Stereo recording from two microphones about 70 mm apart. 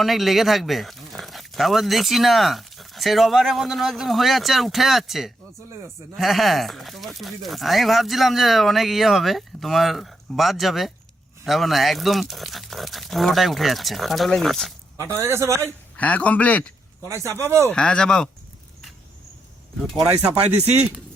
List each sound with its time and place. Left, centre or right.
0.0 s speech: centre
14.9 s a man's voice: right
16.0 s a man's voice: left
17.0 s speech: right
17.7 s speech: centre